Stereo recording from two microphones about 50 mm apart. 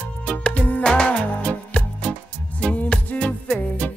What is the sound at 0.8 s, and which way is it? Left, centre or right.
Music, centre.